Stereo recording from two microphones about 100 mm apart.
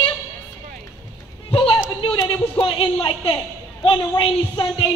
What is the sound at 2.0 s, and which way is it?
A man's voice, 60° left (ahead or behind).